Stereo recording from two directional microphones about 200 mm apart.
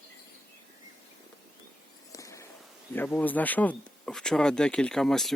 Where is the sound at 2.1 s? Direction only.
15° left (ahead or behind).